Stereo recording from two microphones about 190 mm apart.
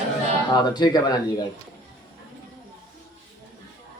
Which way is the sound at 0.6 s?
20° left (ahead or behind).